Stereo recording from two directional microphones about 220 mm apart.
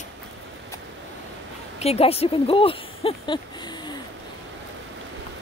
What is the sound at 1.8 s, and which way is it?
Speech, 25° left (ahead or behind).